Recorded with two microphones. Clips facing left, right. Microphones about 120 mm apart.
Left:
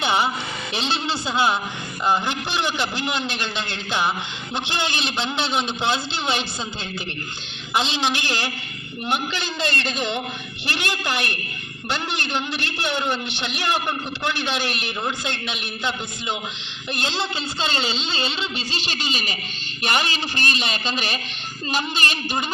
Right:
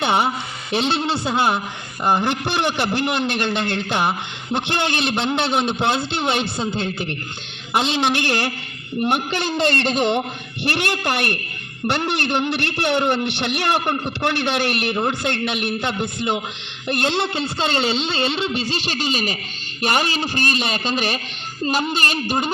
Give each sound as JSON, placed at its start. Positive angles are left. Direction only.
{"t": 0.0, "sound": "a man's voice", "side_deg": -50}